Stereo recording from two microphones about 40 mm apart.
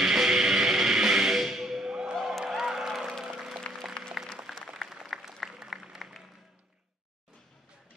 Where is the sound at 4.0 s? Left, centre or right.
Left.